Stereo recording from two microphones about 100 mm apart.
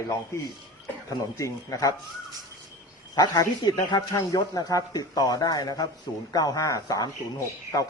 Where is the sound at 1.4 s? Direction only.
35° left (ahead or behind).